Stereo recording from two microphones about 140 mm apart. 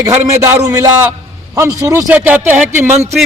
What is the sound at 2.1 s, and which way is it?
Speech, 10° right (ahead or behind).